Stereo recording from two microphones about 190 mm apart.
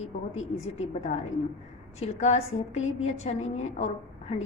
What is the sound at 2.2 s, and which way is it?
A woman's voice, 35° left (ahead or behind).